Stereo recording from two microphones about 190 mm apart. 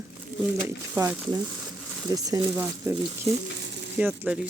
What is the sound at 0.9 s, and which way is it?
Speech, 15° right (ahead or behind).